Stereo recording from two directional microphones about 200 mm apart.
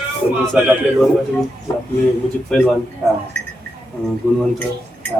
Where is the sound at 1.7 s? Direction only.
20° left (ahead or behind).